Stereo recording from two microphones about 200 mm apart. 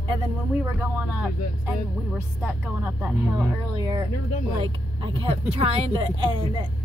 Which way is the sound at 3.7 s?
20° right (ahead or behind).